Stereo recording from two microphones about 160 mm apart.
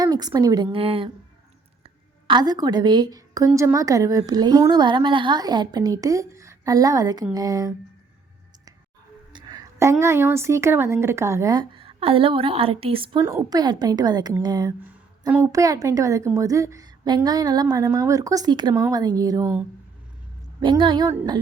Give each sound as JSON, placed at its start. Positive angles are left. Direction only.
{"t": 0.0, "sound": "a woman's voice", "side_deg": -25}
{"t": 9.3, "sound": "a woman's voice", "side_deg": -25}
{"t": 13.1, "sound": "a woman's voice", "side_deg": -20}
{"t": 20.6, "sound": "a woman's voice", "side_deg": -30}